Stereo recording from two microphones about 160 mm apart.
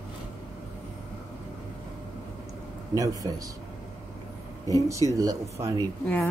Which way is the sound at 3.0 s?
20° right (ahead or behind).